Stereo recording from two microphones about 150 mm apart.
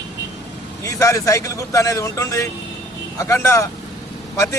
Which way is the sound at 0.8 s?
20° left (ahead or behind).